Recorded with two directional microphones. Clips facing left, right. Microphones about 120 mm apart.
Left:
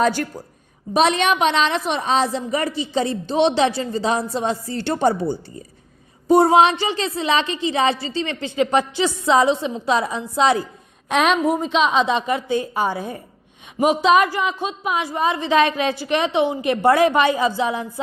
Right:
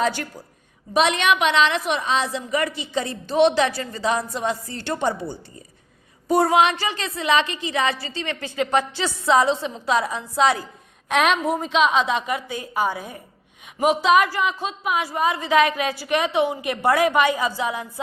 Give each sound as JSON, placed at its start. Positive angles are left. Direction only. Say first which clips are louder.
{"t": 0.0, "sound": "a woman's voice", "louder": "left 4 dB", "side_deg": 45}